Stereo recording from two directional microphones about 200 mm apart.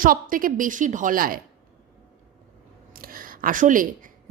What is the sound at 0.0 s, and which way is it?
A woman's voice, 45° right (ahead or behind).